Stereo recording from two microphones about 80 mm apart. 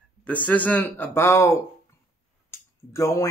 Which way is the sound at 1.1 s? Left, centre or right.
Left.